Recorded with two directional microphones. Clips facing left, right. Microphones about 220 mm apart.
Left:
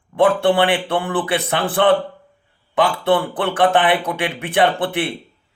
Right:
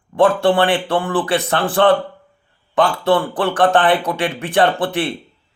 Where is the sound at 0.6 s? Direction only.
15° left (ahead or behind).